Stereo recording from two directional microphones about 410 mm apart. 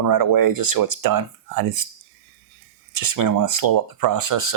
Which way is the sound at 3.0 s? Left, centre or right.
Right.